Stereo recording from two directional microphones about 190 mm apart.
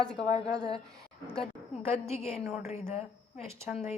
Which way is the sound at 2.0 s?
35° left (ahead or behind).